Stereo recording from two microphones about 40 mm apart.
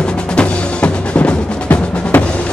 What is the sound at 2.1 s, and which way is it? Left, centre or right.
Music, left.